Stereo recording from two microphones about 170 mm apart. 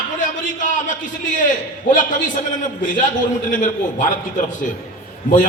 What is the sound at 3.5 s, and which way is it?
Speech, 50° left (ahead or behind).